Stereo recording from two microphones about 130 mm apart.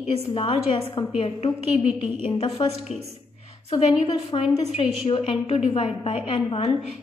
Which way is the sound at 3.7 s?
45° left (ahead or behind).